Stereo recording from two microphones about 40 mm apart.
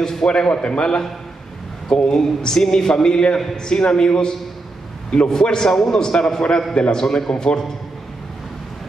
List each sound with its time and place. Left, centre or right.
0.0 s a man's voice: centre
7.0 s a man's voice: centre